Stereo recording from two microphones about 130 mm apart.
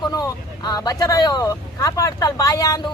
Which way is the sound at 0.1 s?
30° left (ahead or behind).